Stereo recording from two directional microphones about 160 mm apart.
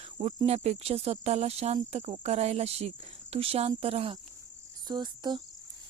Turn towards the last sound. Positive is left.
turn(degrees=-25)  # may be behind; listen again after turning